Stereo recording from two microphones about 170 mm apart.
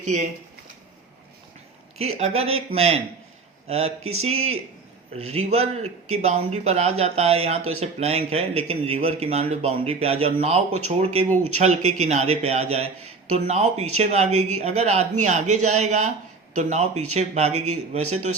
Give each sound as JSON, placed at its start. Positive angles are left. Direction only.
{"t": 0.0, "sound": "speech", "side_deg": -45}
{"t": 2.0, "sound": "speech", "side_deg": -40}